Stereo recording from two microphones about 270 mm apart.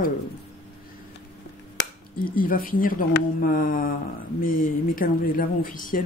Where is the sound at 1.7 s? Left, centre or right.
Left.